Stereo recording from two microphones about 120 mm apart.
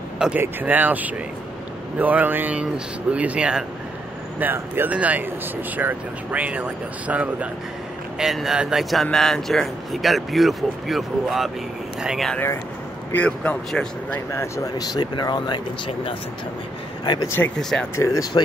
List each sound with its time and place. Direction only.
0.2 s speech: 15° right (ahead or behind)
13.1 s speech: 10° left (ahead or behind)
14.3 s speech: 25° left (ahead or behind)
17.6 s speech: 5° left (ahead or behind)
17.9 s speech: 25° left (ahead or behind)